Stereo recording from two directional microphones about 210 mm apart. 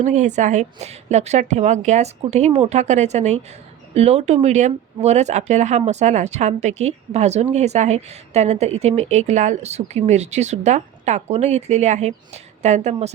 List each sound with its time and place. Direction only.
0.0 s a woman's voice: 35° right (ahead or behind)